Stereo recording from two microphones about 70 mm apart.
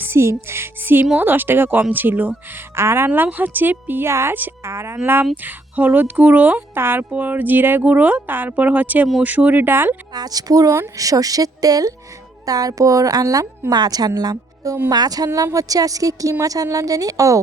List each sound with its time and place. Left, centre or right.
0.0 s speech: right
4.1 s speech: right
10.2 s speech: right
13.7 s a woman's voice: right